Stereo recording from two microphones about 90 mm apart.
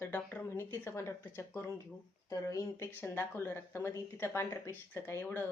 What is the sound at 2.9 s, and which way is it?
Speech, 25° left (ahead or behind).